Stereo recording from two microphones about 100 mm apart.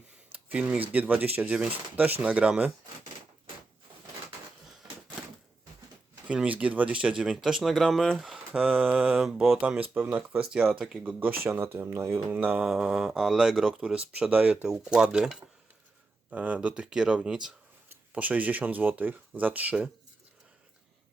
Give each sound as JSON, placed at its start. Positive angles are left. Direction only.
{"t": 0.3, "sound": "speech", "side_deg": -15}
{"t": 6.2, "sound": "speech", "side_deg": -10}
{"t": 10.5, "sound": "speech", "side_deg": -10}
{"t": 11.2, "sound": "speech", "side_deg": -20}
{"t": 12.6, "sound": "speech", "side_deg": -5}